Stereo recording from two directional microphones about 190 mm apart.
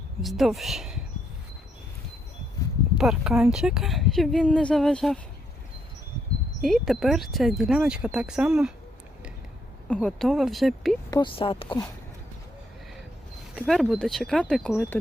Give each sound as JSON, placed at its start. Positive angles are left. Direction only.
{"t": 0.2, "sound": "a woman's voice", "side_deg": 0}
{"t": 3.0, "sound": "a woman's voice", "side_deg": 0}
{"t": 6.6, "sound": "a woman's voice", "side_deg": 0}
{"t": 9.9, "sound": "a woman's voice", "side_deg": 5}
{"t": 11.3, "sound": "speech", "side_deg": 30}
{"t": 13.6, "sound": "a woman's voice", "side_deg": 0}